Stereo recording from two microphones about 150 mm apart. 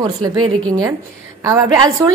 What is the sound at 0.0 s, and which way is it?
A woman's voice, 30° right (ahead or behind).